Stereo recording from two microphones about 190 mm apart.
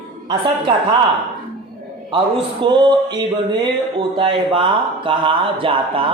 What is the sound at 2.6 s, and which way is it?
Speech, 25° right (ahead or behind).